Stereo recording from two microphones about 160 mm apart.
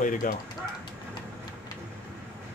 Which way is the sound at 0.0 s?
60° left (ahead or behind).